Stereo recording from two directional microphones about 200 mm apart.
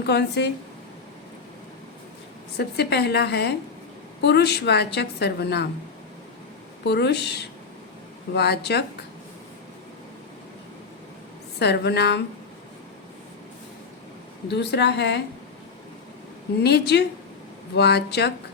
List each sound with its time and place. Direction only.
0.0 s a woman's voice: 55° left (ahead or behind)
2.6 s a woman's voice: 55° left (ahead or behind)
6.8 s a woman's voice: 55° left (ahead or behind)
11.6 s a woman's voice: 55° left (ahead or behind)
14.5 s a woman's voice: 60° left (ahead or behind)
16.6 s a woman's voice: 55° left (ahead or behind)